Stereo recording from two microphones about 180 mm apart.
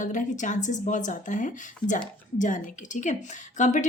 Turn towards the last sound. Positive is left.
turn(degrees=45)  # may be behind; listen again after turning